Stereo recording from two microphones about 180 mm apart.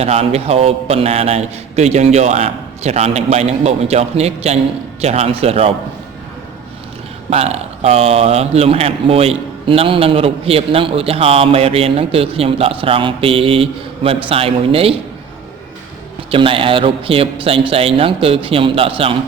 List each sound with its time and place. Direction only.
0.0 s a man's voice: 35° right (ahead or behind)
7.3 s a man's voice: 35° right (ahead or behind)
16.3 s a man's voice: 30° right (ahead or behind)